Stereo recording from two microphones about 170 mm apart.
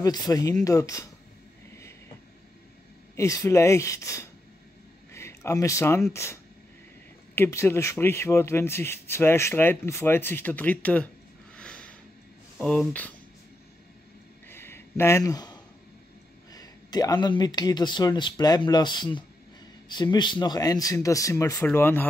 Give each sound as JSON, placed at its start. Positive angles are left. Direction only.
{"t": 0.0, "sound": "speech", "side_deg": 25}
{"t": 3.2, "sound": "speech", "side_deg": 20}
{"t": 7.3, "sound": "speech", "side_deg": 15}
{"t": 11.5, "sound": "a sound", "side_deg": 5}
{"t": 12.5, "sound": "speech", "side_deg": 5}
{"t": 14.5, "sound": "a sound", "side_deg": 15}
{"t": 16.5, "sound": "speech", "side_deg": 20}